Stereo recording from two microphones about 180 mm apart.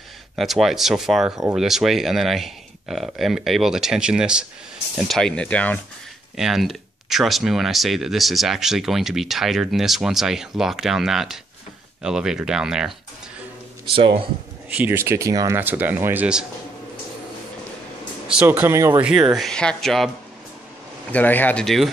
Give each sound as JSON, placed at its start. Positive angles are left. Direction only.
{"t": 0.4, "sound": "speech", "side_deg": 0}
{"t": 13.9, "sound": "speech", "side_deg": -30}
{"t": 14.7, "sound": "speech", "side_deg": -10}
{"t": 18.3, "sound": "speech", "side_deg": -10}
{"t": 19.0, "sound": "speech", "side_deg": -5}
{"t": 21.1, "sound": "a man's voice", "side_deg": 10}